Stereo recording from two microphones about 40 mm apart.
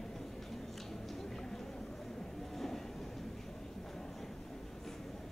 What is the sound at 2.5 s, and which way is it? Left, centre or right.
Train, centre.